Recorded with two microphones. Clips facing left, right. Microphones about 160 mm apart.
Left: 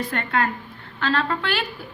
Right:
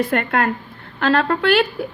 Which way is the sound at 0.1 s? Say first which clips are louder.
Right 5 dB; 55° right (ahead or behind).